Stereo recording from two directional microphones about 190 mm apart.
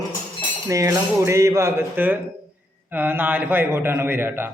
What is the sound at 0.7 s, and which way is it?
A man's voice, 15° right (ahead or behind).